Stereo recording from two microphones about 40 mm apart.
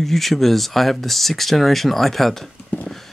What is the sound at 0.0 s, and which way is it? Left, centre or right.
Speech, centre.